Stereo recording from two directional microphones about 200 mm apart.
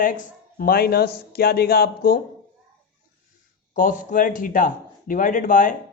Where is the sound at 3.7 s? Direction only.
40° left (ahead or behind).